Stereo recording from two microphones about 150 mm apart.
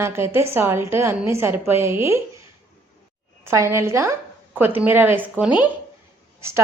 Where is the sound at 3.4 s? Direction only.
15° right (ahead or behind).